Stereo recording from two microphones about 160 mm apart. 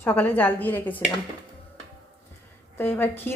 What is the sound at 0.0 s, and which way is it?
A woman's voice, 10° left (ahead or behind).